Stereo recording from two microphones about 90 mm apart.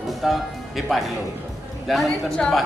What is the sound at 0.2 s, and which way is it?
Speech, 5° right (ahead or behind).